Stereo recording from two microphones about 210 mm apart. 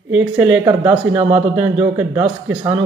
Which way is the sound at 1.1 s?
30° right (ahead or behind).